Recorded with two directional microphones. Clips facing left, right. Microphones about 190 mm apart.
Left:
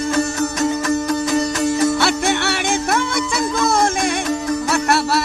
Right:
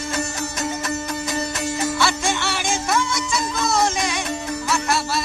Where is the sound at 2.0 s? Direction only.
60° left (ahead or behind).